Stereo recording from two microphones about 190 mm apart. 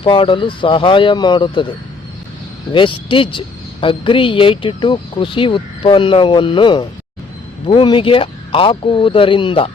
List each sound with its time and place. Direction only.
0.0 s speech: 25° left (ahead or behind)
2.7 s speech: 25° left (ahead or behind)